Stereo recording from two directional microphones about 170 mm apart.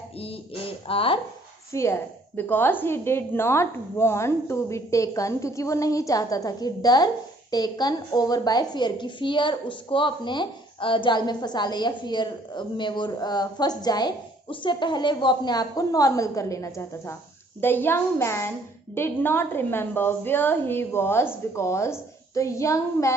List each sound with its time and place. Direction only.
0.2 s a woman's voice: 35° left (ahead or behind)
1.7 s a woman's voice: 15° left (ahead or behind)